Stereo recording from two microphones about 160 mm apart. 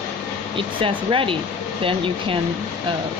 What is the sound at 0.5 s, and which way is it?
A woman's voice, 35° right (ahead or behind).